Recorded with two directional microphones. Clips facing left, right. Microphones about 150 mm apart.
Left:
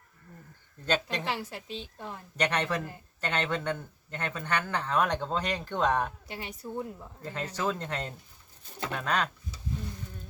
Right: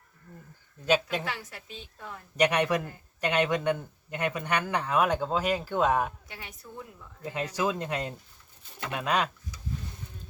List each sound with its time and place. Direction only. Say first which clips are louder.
1.2 s a woman's voice: left 3 dB; 25° left (ahead or behind)
2.3 s a man's voice: right 5 dB; 10° right (ahead or behind)
6.2 s a woman's voice: left 6 dB; 30° left (ahead or behind)
7.2 s a man's voice: right 4 dB; 10° right (ahead or behind)